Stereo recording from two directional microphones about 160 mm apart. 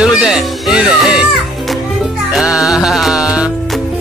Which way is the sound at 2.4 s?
5° right (ahead or behind).